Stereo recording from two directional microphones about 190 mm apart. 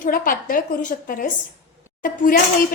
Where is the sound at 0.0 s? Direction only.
45° left (ahead or behind).